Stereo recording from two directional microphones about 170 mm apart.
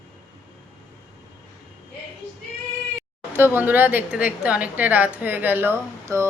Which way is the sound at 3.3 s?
10° right (ahead or behind).